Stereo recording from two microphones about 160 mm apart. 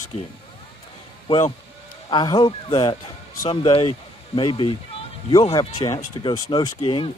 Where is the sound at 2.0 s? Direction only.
25° left (ahead or behind).